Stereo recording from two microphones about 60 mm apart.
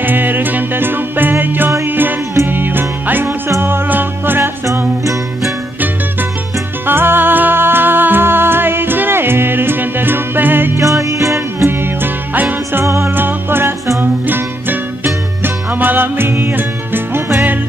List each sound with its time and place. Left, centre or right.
0.0 s music: right
6.9 s music: right
10.8 s music: right
11.6 s music: right
12.8 s music: right
13.1 s music: right